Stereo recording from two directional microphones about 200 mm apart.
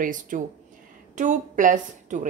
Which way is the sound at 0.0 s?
40° right (ahead or behind).